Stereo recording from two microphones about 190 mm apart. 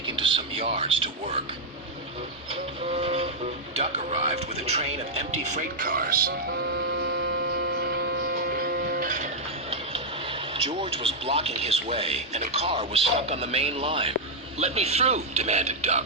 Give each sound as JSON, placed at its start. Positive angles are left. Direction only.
{"t": 0.2, "sound": "a man's voice", "side_deg": -25}
{"t": 2.9, "sound": "vehicle", "side_deg": -30}
{"t": 3.8, "sound": "speech", "side_deg": -35}
{"t": 6.9, "sound": "hum", "side_deg": -55}
{"t": 10.5, "sound": "speech", "side_deg": -30}